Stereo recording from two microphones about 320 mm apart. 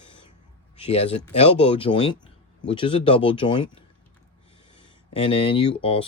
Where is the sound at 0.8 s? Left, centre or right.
Centre.